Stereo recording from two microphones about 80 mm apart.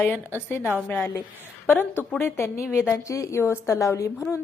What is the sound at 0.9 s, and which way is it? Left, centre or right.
A woman's voice, left.